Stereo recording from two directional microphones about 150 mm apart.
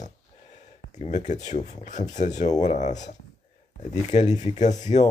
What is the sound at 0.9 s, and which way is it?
Speech, 50° left (ahead or behind).